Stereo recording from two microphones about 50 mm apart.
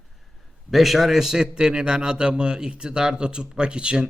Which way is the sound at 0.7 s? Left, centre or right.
Centre.